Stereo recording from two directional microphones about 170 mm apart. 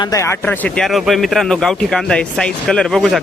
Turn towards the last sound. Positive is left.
turn(degrees=0)  # may be behind; listen again after turning